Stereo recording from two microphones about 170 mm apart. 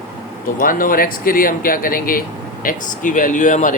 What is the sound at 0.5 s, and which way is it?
Speech, 55° left (ahead or behind).